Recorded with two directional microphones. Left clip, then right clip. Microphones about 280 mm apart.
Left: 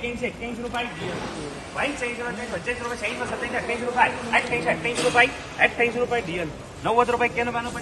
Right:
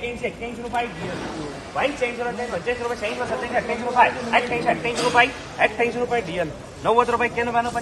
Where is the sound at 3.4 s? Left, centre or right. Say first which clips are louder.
Right 1 dB; right.